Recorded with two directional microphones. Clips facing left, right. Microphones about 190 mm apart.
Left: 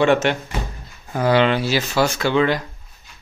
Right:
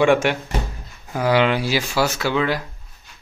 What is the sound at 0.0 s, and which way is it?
Speech, 10° right (ahead or behind).